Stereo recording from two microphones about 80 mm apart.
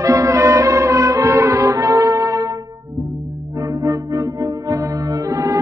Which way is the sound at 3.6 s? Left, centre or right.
Right.